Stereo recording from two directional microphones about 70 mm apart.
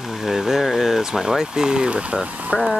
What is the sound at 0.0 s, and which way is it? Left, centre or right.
Speech, centre.